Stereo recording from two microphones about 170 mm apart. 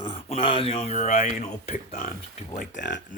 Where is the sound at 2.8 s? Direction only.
90° left.